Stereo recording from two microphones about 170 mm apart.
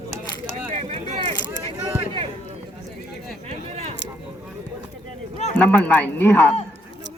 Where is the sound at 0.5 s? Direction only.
45° right (ahead or behind).